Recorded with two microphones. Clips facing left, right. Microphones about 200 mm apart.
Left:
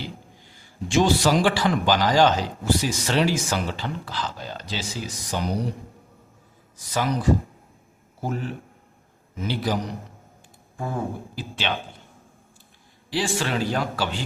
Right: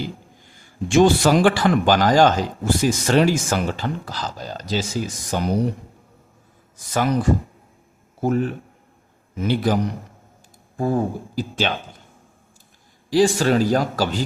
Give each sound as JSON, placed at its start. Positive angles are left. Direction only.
{"t": 0.5, "sound": "a man's voice", "side_deg": -50}
{"t": 6.9, "sound": "a man's voice", "side_deg": -50}
{"t": 10.8, "sound": "a man's voice", "side_deg": -35}
{"t": 13.1, "sound": "a man's voice", "side_deg": -40}